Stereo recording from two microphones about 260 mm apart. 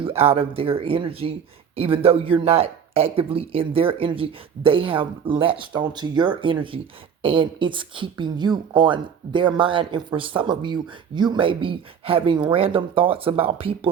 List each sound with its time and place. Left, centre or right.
0.0 s speech: right